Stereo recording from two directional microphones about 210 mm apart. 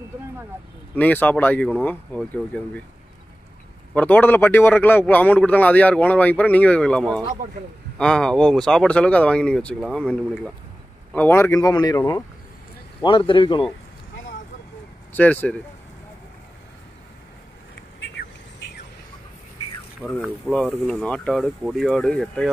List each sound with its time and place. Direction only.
0.9 s a man's voice: 10° left (ahead or behind)
3.9 s a man's voice: 10° left (ahead or behind)
15.1 s a man's voice: 5° left (ahead or behind)
18.1 s a sound: 55° left (ahead or behind)
20.0 s a man's voice: 5° left (ahead or behind)